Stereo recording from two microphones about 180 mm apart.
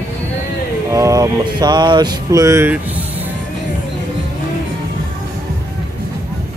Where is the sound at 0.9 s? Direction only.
15° right (ahead or behind).